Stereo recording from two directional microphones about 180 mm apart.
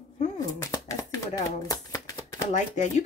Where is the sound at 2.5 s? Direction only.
40° left (ahead or behind).